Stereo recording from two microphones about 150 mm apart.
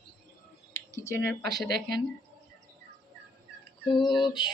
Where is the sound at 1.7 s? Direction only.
90° right.